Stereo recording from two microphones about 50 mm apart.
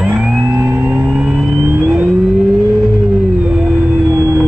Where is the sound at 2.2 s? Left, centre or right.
Centre.